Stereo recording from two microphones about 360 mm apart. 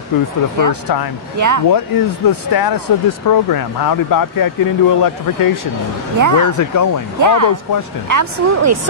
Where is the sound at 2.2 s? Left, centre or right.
Left.